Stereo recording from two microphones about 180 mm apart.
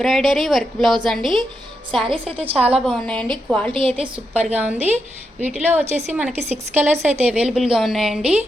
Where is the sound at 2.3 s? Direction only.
35° right (ahead or behind).